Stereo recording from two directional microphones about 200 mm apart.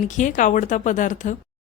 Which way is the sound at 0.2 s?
40° left (ahead or behind).